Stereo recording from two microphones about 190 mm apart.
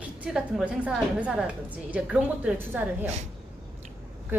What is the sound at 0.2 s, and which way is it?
A woman's voice, 5° right (ahead or behind).